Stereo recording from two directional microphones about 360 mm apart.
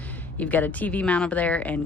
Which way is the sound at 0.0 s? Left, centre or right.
Centre.